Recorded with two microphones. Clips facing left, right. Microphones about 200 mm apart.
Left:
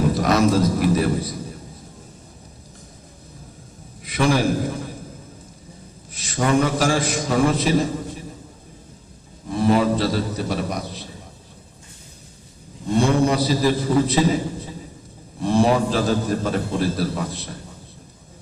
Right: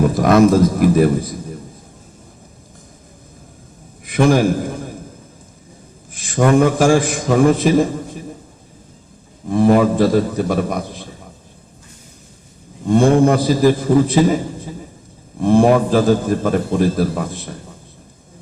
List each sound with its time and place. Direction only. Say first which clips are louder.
0.0 s a man's voice: right 6 dB; 50° right (ahead or behind)
4.0 s a man's voice: right 6 dB; 50° right (ahead or behind)
6.1 s a man's voice: right 6 dB; 50° right (ahead or behind)
9.5 s a man's voice: right 5 dB; 50° right (ahead or behind)
12.9 s a man's voice: right 6 dB; 50° right (ahead or behind)